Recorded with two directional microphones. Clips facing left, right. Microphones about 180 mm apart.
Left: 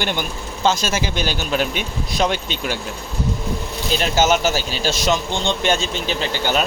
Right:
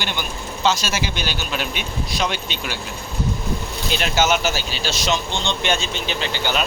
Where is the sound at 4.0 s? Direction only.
45° left (ahead or behind).